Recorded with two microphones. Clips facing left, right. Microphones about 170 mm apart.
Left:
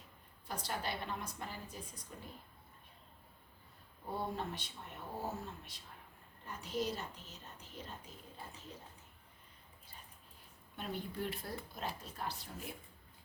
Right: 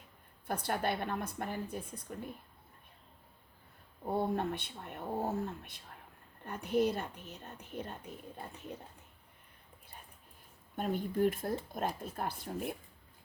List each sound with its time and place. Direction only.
0.4 s speech: 55° right (ahead or behind)
4.0 s speech: 55° right (ahead or behind)
10.8 s speech: 45° right (ahead or behind)